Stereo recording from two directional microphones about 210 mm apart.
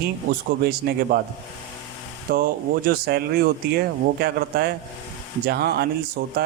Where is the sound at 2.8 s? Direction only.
45° right (ahead or behind).